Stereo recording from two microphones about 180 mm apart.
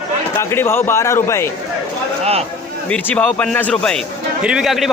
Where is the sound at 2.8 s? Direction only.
10° left (ahead or behind).